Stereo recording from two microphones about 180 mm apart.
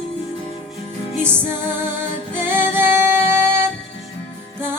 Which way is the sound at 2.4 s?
10° right (ahead or behind).